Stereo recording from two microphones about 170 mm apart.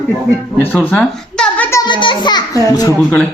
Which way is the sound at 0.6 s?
5° left (ahead or behind).